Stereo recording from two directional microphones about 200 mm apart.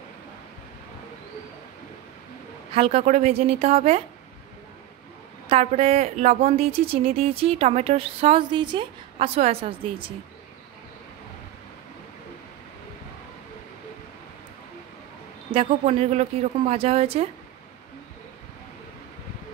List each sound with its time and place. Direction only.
2.7 s a woman's voice: 30° right (ahead or behind)
5.5 s speech: 30° right (ahead or behind)
15.5 s speech: 35° right (ahead or behind)